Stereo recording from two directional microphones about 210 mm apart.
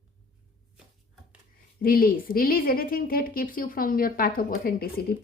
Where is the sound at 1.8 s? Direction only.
45° left (ahead or behind).